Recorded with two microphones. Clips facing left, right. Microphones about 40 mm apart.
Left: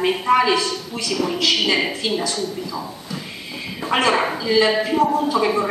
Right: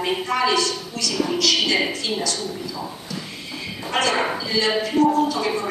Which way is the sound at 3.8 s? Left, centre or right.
Centre.